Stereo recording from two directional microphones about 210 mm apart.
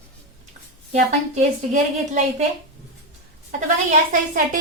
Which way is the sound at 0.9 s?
35° right (ahead or behind).